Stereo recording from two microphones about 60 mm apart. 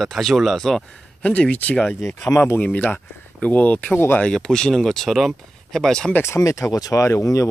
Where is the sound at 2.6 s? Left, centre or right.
Left.